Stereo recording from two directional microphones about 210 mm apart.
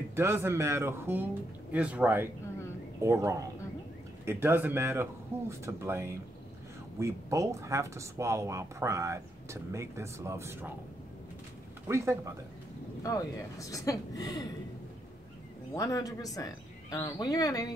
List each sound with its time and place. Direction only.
0.1 s speech: 10° right (ahead or behind)
11.9 s speech: 10° right (ahead or behind)
13.0 s speech: 15° left (ahead or behind)
15.7 s speech: 15° left (ahead or behind)